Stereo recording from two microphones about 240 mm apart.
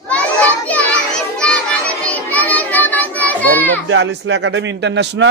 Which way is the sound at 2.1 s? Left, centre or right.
Centre.